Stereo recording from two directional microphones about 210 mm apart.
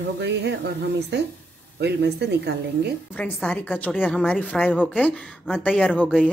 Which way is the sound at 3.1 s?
5° left (ahead or behind).